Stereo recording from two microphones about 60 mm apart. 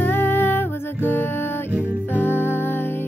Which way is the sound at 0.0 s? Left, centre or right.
Left.